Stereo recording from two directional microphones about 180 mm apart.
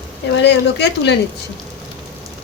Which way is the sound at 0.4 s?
70° left (ahead or behind).